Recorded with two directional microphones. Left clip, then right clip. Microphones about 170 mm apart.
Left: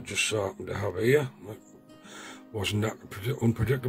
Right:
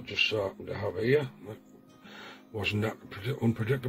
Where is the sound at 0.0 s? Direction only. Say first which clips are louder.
Even; 20° left (ahead or behind).